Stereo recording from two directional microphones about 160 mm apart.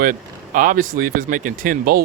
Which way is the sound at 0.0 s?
55° right (ahead or behind).